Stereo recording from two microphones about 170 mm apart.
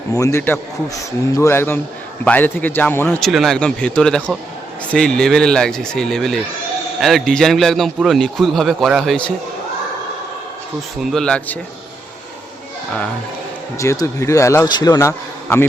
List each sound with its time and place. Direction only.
0.1 s a man's voice: 20° left (ahead or behind)
3.2 s speech: centre (ahead or behind)
11.0 s speech: 5° left (ahead or behind)
13.7 s a man's voice: 20° left (ahead or behind)